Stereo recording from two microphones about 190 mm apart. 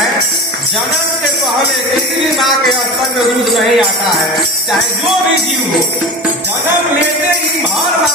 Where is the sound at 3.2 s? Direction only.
Centre (ahead or behind).